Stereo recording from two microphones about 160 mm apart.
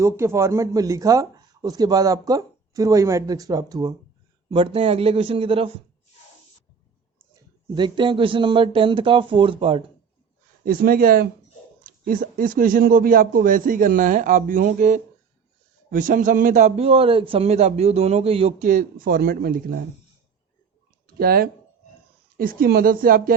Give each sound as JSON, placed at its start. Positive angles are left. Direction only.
{"t": 0.0, "sound": "a man's voice", "side_deg": -15}
{"t": 7.3, "sound": "a man's voice", "side_deg": -30}
{"t": 10.7, "sound": "a man's voice", "side_deg": -65}
{"t": 18.6, "sound": "a man's voice", "side_deg": -55}
{"t": 21.1, "sound": "a man's voice", "side_deg": -70}